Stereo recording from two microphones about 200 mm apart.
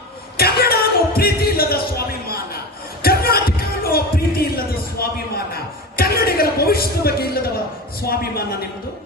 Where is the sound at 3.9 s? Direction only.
50° left (ahead or behind).